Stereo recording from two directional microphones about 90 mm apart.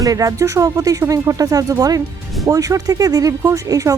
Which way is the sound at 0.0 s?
40° right (ahead or behind).